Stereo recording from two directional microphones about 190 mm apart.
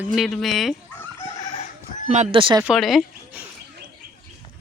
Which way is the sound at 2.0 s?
40° right (ahead or behind).